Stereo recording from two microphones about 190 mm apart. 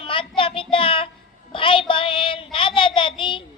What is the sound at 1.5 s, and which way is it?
Child singing, 30° left (ahead or behind).